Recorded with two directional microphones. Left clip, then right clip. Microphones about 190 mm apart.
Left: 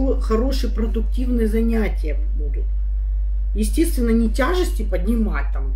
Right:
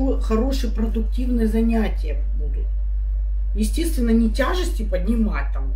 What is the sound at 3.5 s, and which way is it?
Speech, 20° left (ahead or behind).